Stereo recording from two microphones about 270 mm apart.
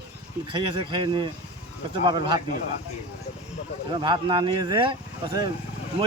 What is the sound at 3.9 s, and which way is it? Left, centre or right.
Speech, centre.